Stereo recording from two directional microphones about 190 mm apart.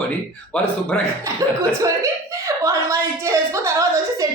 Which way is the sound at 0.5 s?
10° left (ahead or behind).